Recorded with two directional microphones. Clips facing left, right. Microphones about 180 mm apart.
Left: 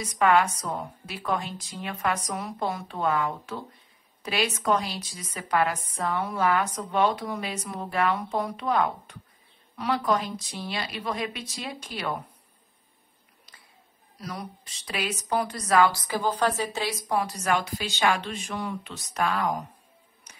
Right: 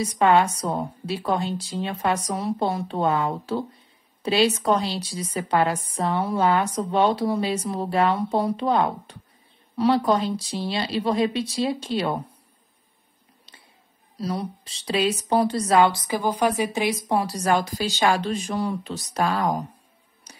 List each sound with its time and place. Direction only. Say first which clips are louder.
0.0 s a woman's voice: right 3 dB; 30° right (ahead or behind)
14.2 s speech: right 9 dB; 30° right (ahead or behind)
17.1 s a woman's voice: right 3 dB; 30° right (ahead or behind)
20.3 s music: right 7 dB; 35° right (ahead or behind)